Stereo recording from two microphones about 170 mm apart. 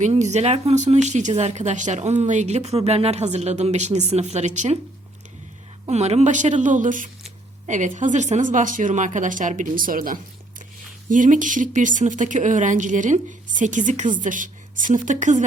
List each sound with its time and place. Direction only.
0.0 s a woman's voice: 45° right (ahead or behind)
5.9 s speech: 40° right (ahead or behind)